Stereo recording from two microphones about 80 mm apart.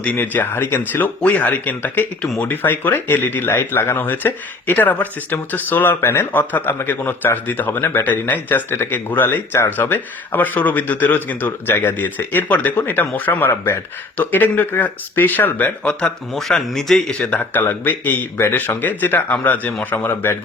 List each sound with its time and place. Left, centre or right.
0.0 s a man's voice: left
16.3 s speech: centre
17.5 s speech: left